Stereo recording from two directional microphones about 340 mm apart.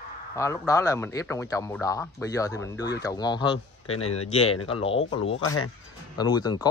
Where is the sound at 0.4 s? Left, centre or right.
Centre.